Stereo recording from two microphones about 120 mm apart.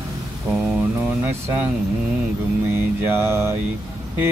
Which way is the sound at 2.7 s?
20° right (ahead or behind).